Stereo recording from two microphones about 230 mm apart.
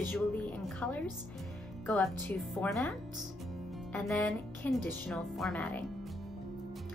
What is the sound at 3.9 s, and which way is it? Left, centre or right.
Speech, centre.